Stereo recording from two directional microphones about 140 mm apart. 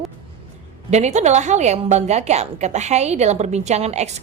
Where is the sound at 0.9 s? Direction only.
55° right (ahead or behind).